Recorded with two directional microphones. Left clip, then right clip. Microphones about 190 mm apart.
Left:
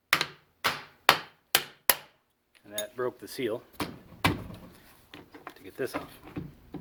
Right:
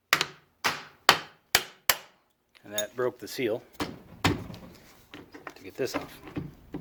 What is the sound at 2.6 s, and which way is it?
Speech, 25° right (ahead or behind).